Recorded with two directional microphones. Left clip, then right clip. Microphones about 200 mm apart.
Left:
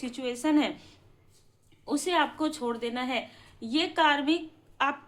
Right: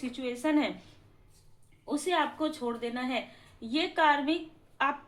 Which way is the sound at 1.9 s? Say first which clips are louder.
Left 2 dB; 25° left (ahead or behind).